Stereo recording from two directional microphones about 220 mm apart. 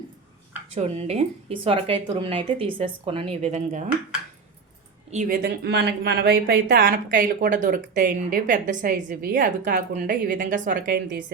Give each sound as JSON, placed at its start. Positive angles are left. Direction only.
{"t": 0.8, "sound": "speech", "side_deg": -30}
{"t": 5.1, "sound": "speech", "side_deg": -40}